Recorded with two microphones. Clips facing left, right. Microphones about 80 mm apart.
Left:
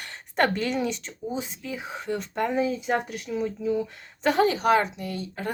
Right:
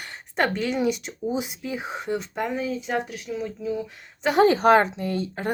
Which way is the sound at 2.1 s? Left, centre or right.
Centre.